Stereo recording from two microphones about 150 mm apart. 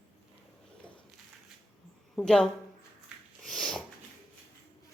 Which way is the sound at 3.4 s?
Centre (ahead or behind).